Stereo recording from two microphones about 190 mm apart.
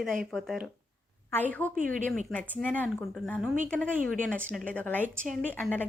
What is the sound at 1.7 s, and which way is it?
Speech, 45° right (ahead or behind).